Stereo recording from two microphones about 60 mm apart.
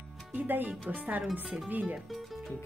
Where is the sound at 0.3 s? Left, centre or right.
Right.